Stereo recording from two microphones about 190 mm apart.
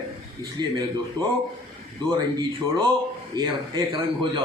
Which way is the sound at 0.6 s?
20° right (ahead or behind).